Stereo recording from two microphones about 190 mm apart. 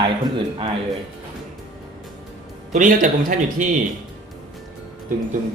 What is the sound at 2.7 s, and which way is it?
Speech, 45° right (ahead or behind).